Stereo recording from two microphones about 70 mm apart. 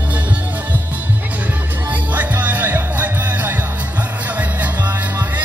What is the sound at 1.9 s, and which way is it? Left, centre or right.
Music, right.